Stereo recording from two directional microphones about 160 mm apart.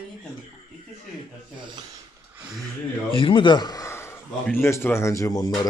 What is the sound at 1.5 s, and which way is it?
Speech, 30° right (ahead or behind).